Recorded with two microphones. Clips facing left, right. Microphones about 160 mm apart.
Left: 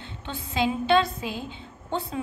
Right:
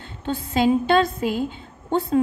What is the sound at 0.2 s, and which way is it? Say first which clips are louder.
A woman's voice: right 6 dB; 45° right (ahead or behind).